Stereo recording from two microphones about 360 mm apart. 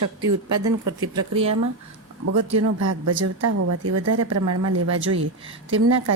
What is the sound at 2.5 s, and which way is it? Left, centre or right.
A woman's voice, right.